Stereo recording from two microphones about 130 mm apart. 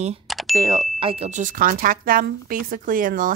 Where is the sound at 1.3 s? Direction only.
80° right.